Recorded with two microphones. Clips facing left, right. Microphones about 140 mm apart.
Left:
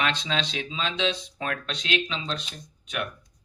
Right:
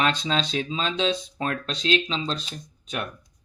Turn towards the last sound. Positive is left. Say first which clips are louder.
# right 1 dB
turn(degrees=-35)  # may be behind; listen again after turning